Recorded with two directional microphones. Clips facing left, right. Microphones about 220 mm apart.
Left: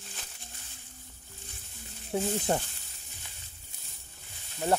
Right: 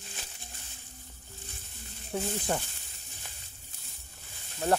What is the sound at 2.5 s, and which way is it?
Speech, 30° left (ahead or behind).